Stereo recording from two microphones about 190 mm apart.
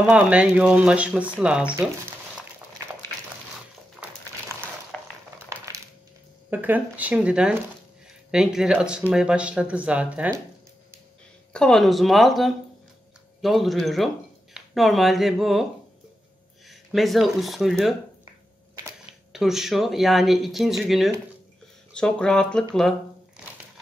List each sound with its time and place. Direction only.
0.0 s speech: 5° right (ahead or behind)
4.9 s a sound: 5° left (ahead or behind)
5.5 s crushing: 15° right (ahead or behind)
6.5 s speech: 10° right (ahead or behind)
11.5 s speech: centre (ahead or behind)
16.6 s speech: centre (ahead or behind)
19.3 s speech: centre (ahead or behind)
22.8 s a sound: centre (ahead or behind)